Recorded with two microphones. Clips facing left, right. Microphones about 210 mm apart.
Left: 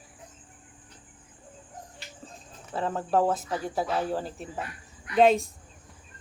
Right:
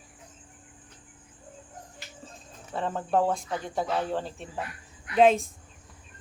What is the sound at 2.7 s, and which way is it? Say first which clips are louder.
Speech: left 1 dB; centre (ahead or behind).